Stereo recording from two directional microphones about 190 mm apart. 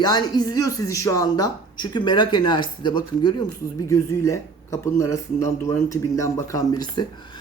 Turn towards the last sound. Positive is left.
turn(degrees=25)  # may be behind; listen again after turning